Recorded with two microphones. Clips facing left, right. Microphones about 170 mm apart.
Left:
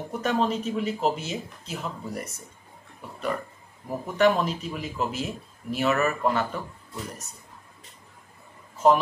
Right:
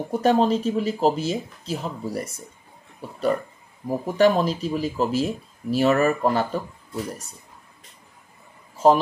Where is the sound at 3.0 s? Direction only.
35° right (ahead or behind).